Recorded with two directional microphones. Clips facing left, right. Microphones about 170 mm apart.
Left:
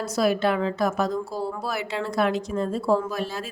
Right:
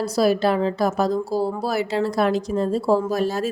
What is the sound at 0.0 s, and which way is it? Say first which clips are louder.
Speech: right 4 dB; 35° right (ahead or behind).